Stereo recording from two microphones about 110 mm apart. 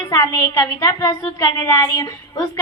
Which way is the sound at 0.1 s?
35° left (ahead or behind).